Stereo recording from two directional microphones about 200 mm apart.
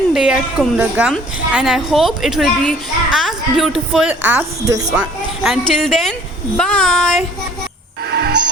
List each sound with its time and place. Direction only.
0.1 s a child's voice: centre (ahead or behind)
4.9 s a child's voice: centre (ahead or behind)